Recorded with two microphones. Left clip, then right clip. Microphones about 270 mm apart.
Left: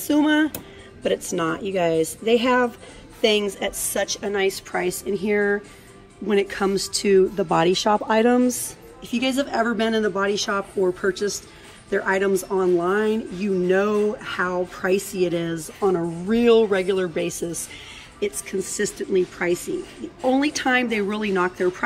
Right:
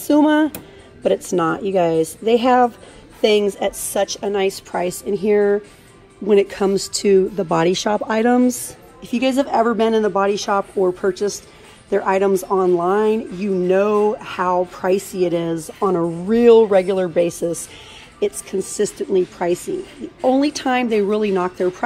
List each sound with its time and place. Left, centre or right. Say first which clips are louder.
0.0 s a woman's voice: right 5 dB; centre
7.2 s speech: right 1 dB; left
7.5 s speech: right 2 dB; right
7.9 s speech: right 1 dB; left
9.1 s a woman's voice: right 5 dB; centre
12.5 s speech: right 3 dB; left
12.9 s a woman's voice: right 5 dB; centre